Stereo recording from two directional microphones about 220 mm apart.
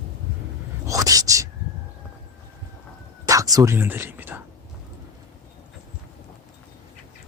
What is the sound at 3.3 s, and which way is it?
Whispering, 15° right (ahead or behind).